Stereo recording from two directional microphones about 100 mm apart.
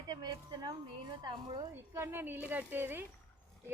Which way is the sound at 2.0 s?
20° right (ahead or behind).